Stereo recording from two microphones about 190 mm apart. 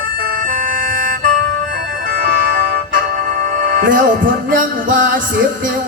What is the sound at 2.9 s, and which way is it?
Music, 50° right (ahead or behind).